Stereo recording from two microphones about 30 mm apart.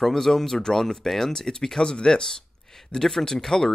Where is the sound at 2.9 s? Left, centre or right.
Centre.